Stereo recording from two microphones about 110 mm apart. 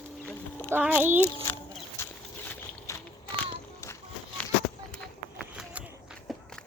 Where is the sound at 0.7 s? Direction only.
15° right (ahead or behind).